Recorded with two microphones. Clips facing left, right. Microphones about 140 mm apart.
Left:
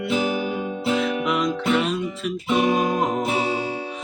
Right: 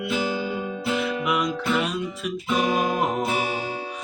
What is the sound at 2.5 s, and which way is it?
Music, 25° left (ahead or behind).